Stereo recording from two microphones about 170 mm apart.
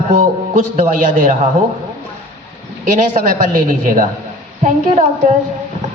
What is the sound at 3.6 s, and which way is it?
Speech, 50° right (ahead or behind).